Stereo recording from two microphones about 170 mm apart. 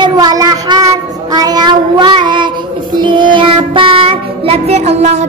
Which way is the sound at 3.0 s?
30° right (ahead or behind).